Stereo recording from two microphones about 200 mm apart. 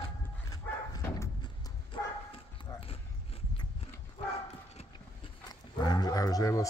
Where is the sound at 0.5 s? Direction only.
20° left (ahead or behind).